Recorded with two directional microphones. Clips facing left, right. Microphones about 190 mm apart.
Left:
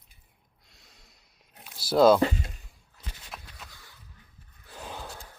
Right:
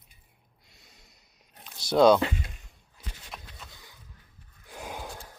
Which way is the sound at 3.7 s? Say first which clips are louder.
Right 1 dB; 15° right (ahead or behind).